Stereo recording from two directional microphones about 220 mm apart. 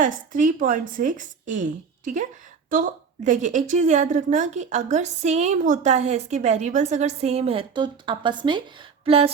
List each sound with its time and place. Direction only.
0.0 s a woman's voice: 35° right (ahead or behind)
2.6 s a woman's voice: 40° right (ahead or behind)